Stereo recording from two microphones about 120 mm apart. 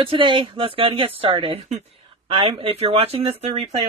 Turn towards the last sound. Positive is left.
turn(degrees=-55)  # may be behind; listen again after turning